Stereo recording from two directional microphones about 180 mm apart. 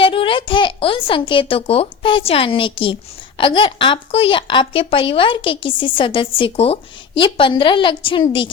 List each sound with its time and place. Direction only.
0.0 s a child's voice: 30° left (ahead or behind)